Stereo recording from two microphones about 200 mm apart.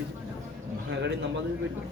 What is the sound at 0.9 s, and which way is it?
Speech, 60° right (ahead or behind).